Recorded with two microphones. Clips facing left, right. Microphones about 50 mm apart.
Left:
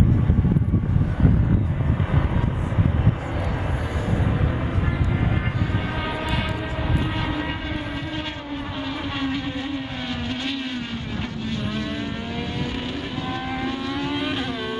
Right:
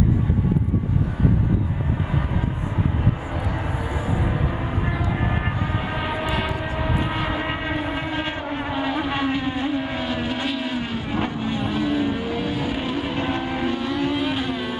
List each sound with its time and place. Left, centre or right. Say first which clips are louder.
4.1 s vehicle: left 1 dB; centre
5.9 s vehicle: right 1 dB; centre
8.7 s vehicle: right 6 dB; centre
13.1 s vehicle: right 4 dB; right
13.4 s vehicle: right 3 dB; centre